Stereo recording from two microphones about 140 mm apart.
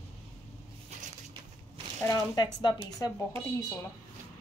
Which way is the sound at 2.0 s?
25° left (ahead or behind).